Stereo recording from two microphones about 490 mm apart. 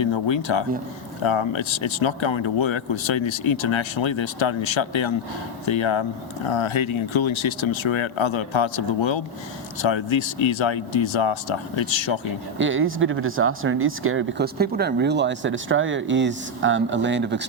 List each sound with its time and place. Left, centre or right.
0.0 s speech: left
12.5 s speech: right